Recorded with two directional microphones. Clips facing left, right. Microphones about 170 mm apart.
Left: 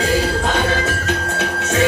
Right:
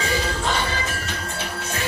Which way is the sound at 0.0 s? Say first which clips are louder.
Left 6 dB; 60° left (ahead or behind).